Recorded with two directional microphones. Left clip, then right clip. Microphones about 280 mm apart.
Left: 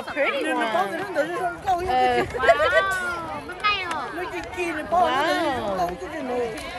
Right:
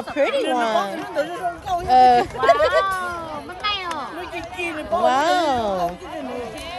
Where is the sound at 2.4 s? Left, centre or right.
Right.